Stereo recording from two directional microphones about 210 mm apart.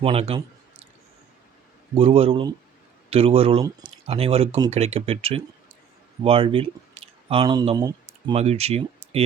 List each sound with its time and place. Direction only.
0.0 s speech: 25° right (ahead or behind)
2.0 s speech: 25° right (ahead or behind)
4.0 s speech: 30° right (ahead or behind)